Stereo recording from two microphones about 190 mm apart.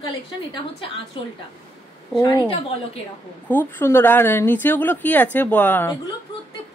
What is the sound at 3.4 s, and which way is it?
Speech, 10° left (ahead or behind).